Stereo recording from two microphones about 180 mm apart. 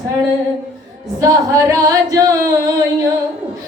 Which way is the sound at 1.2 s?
20° right (ahead or behind).